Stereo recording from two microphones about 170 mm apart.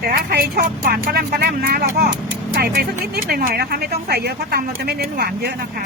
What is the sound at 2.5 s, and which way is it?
Vehicle, 65° right (ahead or behind).